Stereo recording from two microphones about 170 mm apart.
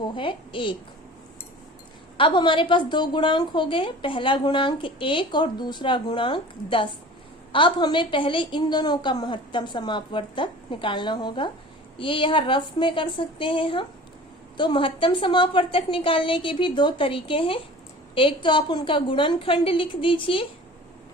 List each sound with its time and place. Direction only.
0.2 s a woman's voice: 30° left (ahead or behind)
2.1 s a woman's voice: 30° left (ahead or behind)